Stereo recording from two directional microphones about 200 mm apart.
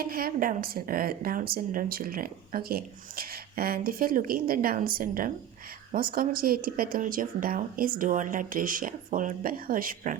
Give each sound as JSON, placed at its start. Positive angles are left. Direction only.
{"t": 0.0, "sound": "speech", "side_deg": -50}